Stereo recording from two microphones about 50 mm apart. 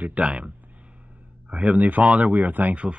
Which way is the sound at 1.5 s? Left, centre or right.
Right.